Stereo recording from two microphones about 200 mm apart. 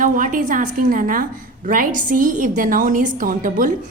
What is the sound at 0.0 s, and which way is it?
A woman's voice, 40° right (ahead or behind).